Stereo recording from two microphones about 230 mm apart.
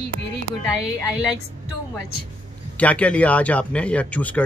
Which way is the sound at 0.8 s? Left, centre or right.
Centre.